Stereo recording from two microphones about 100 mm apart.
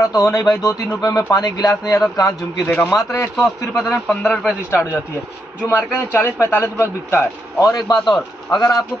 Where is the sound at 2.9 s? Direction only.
30° left (ahead or behind).